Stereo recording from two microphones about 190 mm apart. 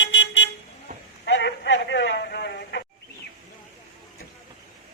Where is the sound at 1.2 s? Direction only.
65° left (ahead or behind).